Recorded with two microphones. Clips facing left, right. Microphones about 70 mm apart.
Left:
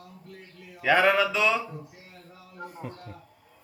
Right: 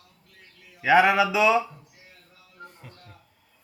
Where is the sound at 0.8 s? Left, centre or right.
Centre.